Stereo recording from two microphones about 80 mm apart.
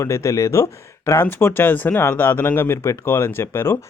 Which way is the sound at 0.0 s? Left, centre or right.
Left.